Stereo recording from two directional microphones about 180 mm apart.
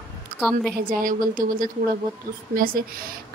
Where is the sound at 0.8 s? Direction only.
50° right (ahead or behind).